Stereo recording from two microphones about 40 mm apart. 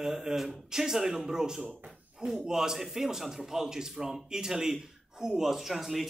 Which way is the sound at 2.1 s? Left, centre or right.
Centre.